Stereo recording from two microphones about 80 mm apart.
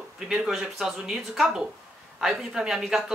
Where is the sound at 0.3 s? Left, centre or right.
Centre.